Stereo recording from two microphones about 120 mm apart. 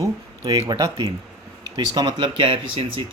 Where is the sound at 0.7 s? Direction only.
35° right (ahead or behind).